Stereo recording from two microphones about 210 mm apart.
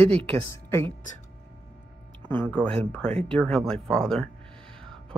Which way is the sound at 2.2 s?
10° left (ahead or behind).